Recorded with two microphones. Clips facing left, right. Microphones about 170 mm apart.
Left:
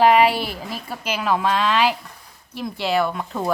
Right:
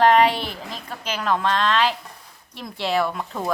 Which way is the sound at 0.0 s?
5° left (ahead or behind).